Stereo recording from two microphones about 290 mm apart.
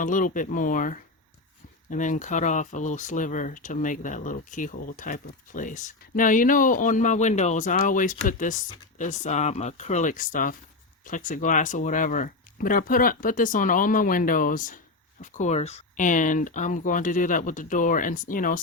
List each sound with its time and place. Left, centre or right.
0.0 s speech: left